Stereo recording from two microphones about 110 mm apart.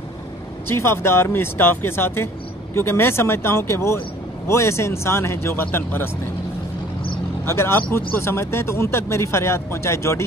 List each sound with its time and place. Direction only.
0.7 s speech: 20° left (ahead or behind)
7.4 s speech: 25° left (ahead or behind)